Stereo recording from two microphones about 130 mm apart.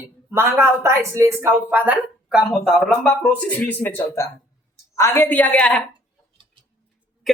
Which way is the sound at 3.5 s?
15° left (ahead or behind).